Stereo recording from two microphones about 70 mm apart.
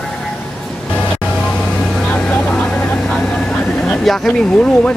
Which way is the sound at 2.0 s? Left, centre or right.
Centre.